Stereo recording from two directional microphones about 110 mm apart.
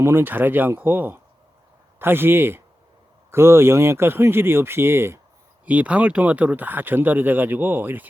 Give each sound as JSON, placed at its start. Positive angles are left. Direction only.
{"t": 0.0, "sound": "speech", "side_deg": -20}
{"t": 5.6, "sound": "speech", "side_deg": -10}